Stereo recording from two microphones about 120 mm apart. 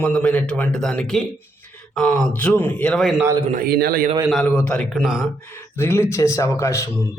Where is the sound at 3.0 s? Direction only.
Centre (ahead or behind).